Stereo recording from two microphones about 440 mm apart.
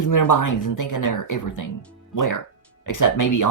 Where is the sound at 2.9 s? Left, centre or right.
Left.